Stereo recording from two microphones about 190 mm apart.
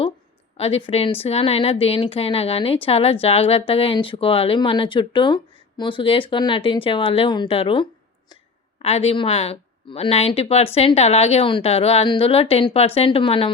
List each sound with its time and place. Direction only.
0.5 s a woman's voice: 30° left (ahead or behind)